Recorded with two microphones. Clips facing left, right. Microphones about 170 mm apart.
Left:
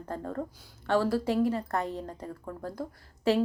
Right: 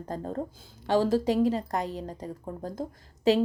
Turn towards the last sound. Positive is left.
turn(degrees=-20)  # may be behind; listen again after turning